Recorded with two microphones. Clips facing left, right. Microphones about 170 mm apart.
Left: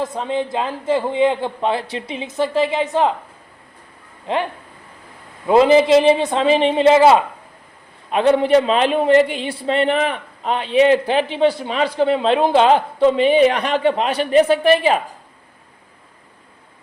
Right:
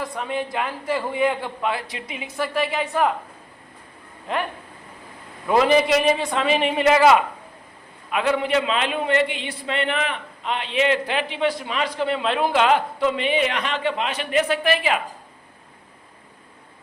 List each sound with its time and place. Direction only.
0.0 s a man's voice: 25° left (ahead or behind)
4.3 s a man's voice: 25° left (ahead or behind)
5.5 s a man's voice: 25° left (ahead or behind)